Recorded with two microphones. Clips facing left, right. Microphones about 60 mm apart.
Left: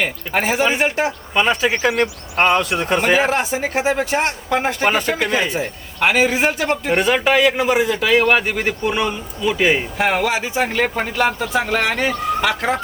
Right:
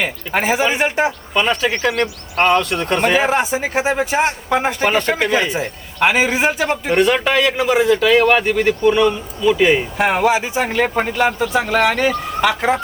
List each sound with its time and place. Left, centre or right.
0.0 s speech: centre
1.3 s a man's voice: centre
3.2 s speech: centre
4.8 s a man's voice: centre
10.2 s speech: centre
10.7 s speech: centre